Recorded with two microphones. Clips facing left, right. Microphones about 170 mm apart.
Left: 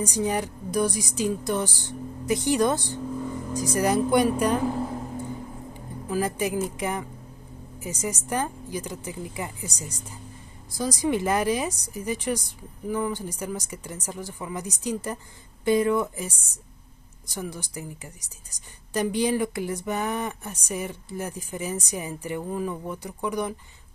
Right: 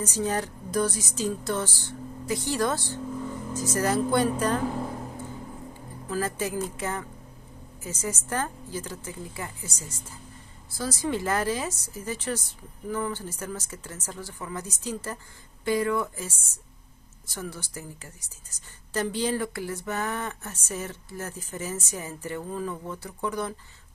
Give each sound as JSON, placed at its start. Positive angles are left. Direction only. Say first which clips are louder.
{"t": 0.0, "sound": "a woman's voice", "louder": "left 2 dB", "side_deg": 15}
{"t": 6.0, "sound": "a woman's voice", "louder": "left 3 dB", "side_deg": 15}